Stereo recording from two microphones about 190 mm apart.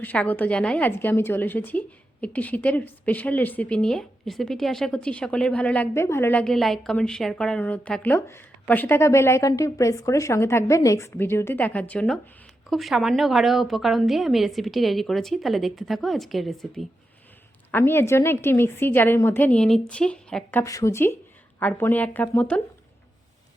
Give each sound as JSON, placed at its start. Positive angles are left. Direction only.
{"t": 0.0, "sound": "a woman's voice", "side_deg": 10}
{"t": 17.7, "sound": "a woman's voice", "side_deg": 10}